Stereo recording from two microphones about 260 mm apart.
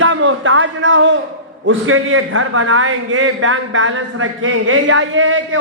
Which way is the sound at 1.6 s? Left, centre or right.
Right.